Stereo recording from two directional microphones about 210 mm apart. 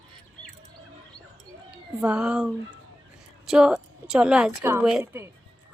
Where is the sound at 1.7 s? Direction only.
5° right (ahead or behind).